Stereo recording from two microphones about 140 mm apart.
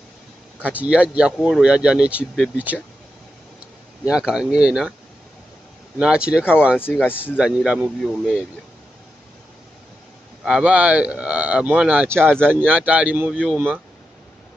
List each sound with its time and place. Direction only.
0.7 s speech: 10° right (ahead or behind)
4.0 s speech: 5° right (ahead or behind)
5.9 s speech: 5° right (ahead or behind)
7.1 s speech: 15° left (ahead or behind)
7.3 s speech: 5° right (ahead or behind)
8.0 s speech: 5° left (ahead or behind)
10.4 s speech: 5° right (ahead or behind)